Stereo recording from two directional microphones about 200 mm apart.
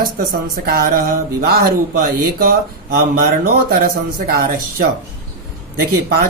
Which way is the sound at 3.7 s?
45° right (ahead or behind).